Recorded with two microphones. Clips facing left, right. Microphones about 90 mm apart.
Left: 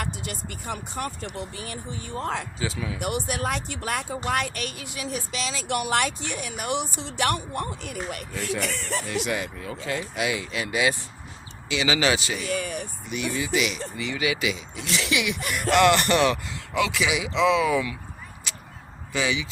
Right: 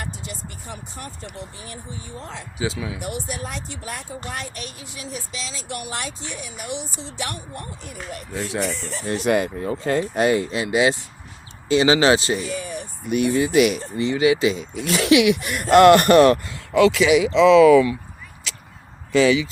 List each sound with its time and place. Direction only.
0.0 s speech: 65° left (ahead or behind)
2.6 s speech: 15° right (ahead or behind)
3.0 s speech: 65° left (ahead or behind)
8.3 s speech: 20° right (ahead or behind)
8.6 s speech: 65° left (ahead or behind)
9.0 s speech: 40° right (ahead or behind)
10.5 s speech: 25° right (ahead or behind)
11.7 s speech: 35° right (ahead or behind)
12.5 s speech: 65° left (ahead or behind)
13.1 s speech: 50° right (ahead or behind)
14.0 s speech: 30° right (ahead or behind)
14.5 s speech: 50° right (ahead or behind)
17.5 s speech: 70° right (ahead or behind)
19.1 s speech: 55° right (ahead or behind)